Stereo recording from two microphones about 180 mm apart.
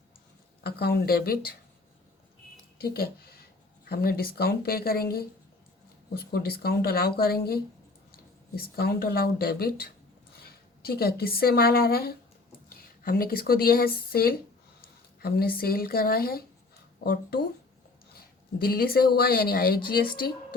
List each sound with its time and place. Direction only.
0.6 s speech: 60° left (ahead or behind)
2.7 s speech: 60° left (ahead or behind)